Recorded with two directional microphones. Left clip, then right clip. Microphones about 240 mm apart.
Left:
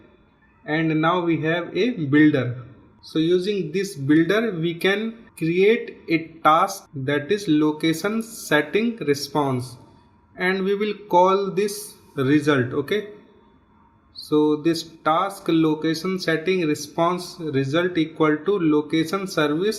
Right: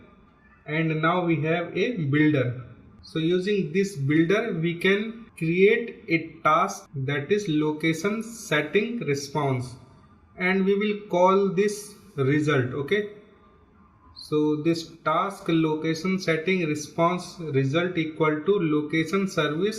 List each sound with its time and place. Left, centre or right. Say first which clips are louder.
0.6 s speech: left 4 dB; left
14.3 s speech: left 4 dB; left